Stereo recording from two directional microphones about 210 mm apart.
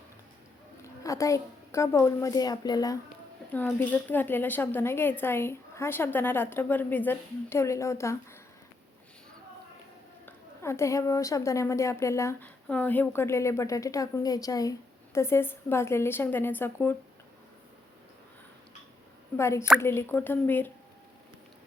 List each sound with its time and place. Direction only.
0.8 s a woman's voice: 15° left (ahead or behind)
10.2 s a woman's voice: 10° left (ahead or behind)
19.4 s a woman's voice: 15° left (ahead or behind)